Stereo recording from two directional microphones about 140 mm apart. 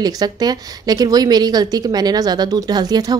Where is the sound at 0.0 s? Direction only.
30° right (ahead or behind).